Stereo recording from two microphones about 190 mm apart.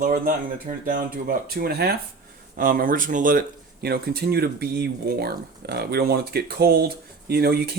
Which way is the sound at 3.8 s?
55° right (ahead or behind).